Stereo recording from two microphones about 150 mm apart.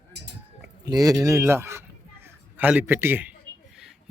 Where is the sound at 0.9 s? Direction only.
25° right (ahead or behind); by 4.1 s 5° right (ahead or behind).